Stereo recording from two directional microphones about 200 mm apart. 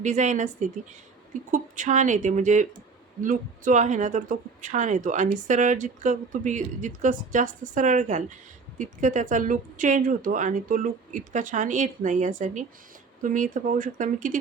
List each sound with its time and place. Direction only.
0.0 s speech: 35° right (ahead or behind)